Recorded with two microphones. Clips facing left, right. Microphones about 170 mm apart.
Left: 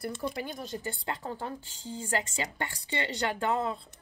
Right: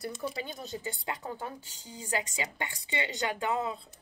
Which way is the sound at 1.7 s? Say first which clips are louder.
Left 3 dB; 15° right (ahead or behind).